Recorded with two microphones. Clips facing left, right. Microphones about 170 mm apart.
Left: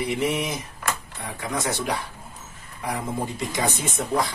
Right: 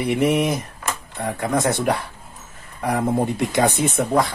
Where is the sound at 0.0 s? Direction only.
60° right (ahead or behind).